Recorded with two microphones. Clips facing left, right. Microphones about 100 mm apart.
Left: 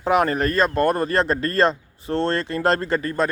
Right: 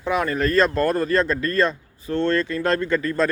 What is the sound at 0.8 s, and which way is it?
Speech, 25° left (ahead or behind).